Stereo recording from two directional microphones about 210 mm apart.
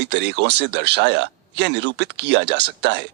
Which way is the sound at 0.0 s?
55° right (ahead or behind).